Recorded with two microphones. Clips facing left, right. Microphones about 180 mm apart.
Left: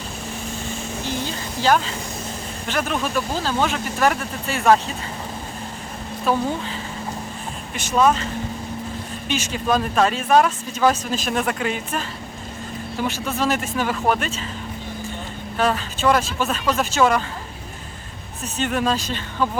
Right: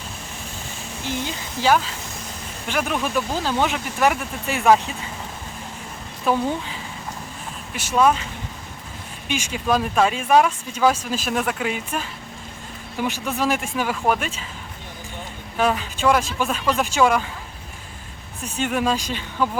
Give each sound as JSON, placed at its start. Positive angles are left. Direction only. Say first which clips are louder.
{"t": 1.2, "sound": "speech", "louder": "even", "side_deg": -10}
{"t": 6.3, "sound": "speech", "louder": "even", "side_deg": -15}
{"t": 7.7, "sound": "speech", "louder": "even", "side_deg": -10}
{"t": 9.3, "sound": "speech", "louder": "even", "side_deg": -10}
{"t": 15.5, "sound": "speech", "louder": "even", "side_deg": -10}
{"t": 18.4, "sound": "speech", "louder": "even", "side_deg": -10}